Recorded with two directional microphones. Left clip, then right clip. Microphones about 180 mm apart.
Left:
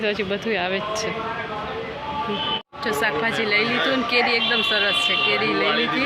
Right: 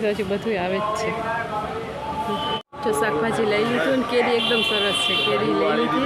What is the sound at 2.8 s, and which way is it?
Speech, 10° right (ahead or behind).